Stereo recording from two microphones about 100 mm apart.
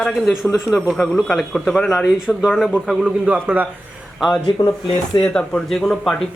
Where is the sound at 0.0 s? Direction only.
5° left (ahead or behind).